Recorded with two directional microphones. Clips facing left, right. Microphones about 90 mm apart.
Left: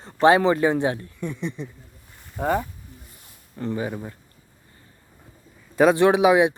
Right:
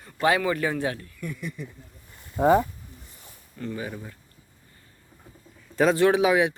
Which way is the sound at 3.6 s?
25° left (ahead or behind).